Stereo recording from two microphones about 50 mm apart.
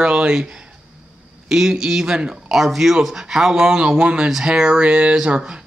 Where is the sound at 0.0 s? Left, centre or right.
Centre.